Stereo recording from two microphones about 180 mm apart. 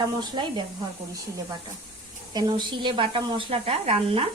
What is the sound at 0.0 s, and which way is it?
Speech, 25° right (ahead or behind).